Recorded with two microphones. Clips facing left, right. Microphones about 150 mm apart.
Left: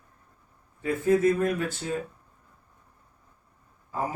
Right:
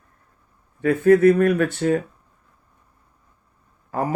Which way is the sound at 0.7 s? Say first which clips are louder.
Right 8 dB; 70° right (ahead or behind).